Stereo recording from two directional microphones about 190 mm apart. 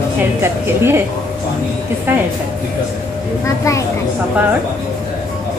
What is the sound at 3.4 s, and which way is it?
Speech, 15° left (ahead or behind).